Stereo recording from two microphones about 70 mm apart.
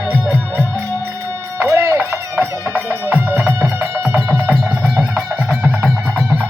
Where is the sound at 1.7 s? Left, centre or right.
Right.